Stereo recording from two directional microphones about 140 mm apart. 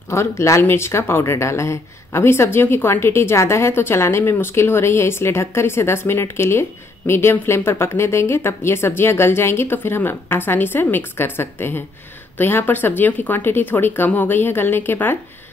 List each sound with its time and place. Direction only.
0.1 s speech: 20° left (ahead or behind)